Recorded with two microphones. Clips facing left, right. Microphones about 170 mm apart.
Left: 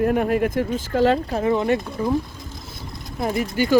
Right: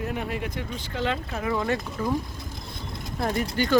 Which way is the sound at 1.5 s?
20° left (ahead or behind).